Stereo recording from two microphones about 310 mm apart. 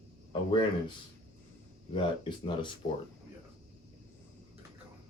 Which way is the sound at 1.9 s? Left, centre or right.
Centre.